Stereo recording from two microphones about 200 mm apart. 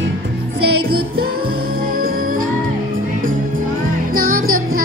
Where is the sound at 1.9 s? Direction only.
45° right (ahead or behind).